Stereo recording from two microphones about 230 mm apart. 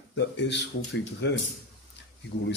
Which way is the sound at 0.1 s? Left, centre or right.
Left.